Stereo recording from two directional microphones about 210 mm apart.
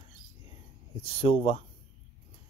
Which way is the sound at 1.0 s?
25° left (ahead or behind).